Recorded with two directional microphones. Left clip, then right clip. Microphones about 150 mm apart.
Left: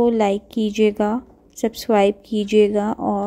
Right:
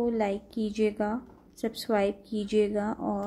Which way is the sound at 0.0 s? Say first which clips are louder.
Left 11 dB; 55° left (ahead or behind).